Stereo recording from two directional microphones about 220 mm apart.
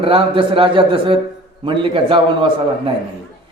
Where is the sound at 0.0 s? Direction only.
25° right (ahead or behind).